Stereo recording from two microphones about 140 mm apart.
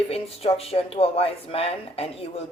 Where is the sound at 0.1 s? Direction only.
45° left (ahead or behind).